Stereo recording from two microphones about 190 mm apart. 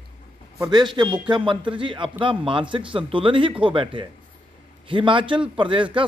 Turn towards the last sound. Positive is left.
turn(degrees=-25)  # may be behind; listen again after turning